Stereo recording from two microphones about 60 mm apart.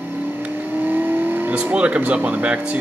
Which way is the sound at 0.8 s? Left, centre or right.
Right.